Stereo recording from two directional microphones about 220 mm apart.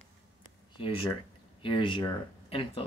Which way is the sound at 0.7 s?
25° left (ahead or behind).